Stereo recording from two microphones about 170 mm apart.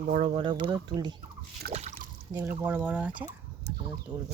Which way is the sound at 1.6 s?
65° right (ahead or behind).